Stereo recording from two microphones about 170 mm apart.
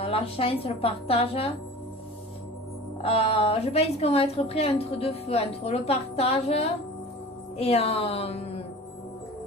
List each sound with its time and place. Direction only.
0.0 s a woman's voice: 35° left (ahead or behind)
3.0 s a woman's voice: 35° left (ahead or behind)